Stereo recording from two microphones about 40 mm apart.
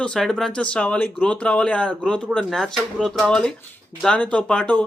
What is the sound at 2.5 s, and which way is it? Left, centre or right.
Speech, centre.